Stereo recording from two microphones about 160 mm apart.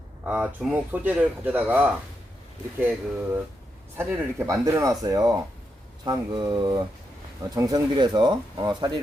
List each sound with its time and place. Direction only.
0.3 s speech: 10° right (ahead or behind); by 9.0 s 25° right (ahead or behind)